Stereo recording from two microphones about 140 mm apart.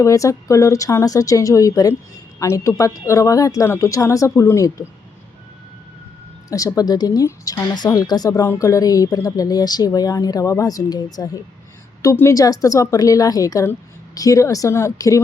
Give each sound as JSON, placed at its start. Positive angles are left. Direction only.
{"t": 0.0, "sound": "speech", "side_deg": 25}
{"t": 6.5, "sound": "speech", "side_deg": 25}